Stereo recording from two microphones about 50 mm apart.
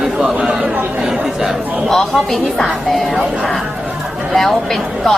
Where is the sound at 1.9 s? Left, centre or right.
Centre.